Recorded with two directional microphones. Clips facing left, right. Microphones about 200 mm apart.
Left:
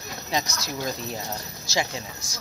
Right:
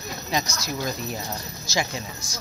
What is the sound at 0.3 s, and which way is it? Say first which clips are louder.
Speech: right 1 dB; 25° left (ahead or behind).